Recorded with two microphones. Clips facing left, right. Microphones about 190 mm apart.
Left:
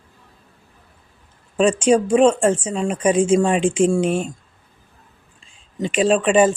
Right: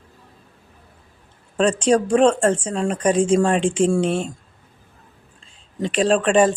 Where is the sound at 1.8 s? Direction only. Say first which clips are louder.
Left 1 dB; 5° left (ahead or behind).